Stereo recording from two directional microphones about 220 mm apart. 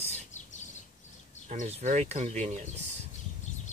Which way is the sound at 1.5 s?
30° right (ahead or behind).